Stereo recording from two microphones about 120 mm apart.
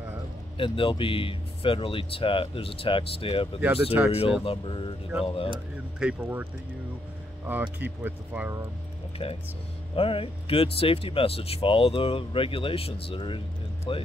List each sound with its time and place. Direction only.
0.6 s speech: 45° left (ahead or behind)
3.6 s speech: 15° right (ahead or behind)
4.5 s speech: 45° left (ahead or behind)
6.0 s speech: 5° right (ahead or behind)
7.4 s speech: 15° right (ahead or behind)
9.2 s speech: 50° left (ahead or behind)